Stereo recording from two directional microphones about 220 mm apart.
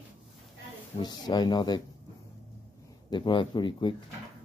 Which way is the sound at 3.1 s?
20° left (ahead or behind).